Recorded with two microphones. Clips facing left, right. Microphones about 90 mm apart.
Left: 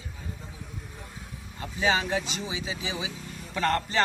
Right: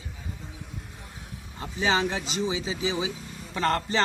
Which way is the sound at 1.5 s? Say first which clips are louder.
Right 1 dB; 30° right (ahead or behind).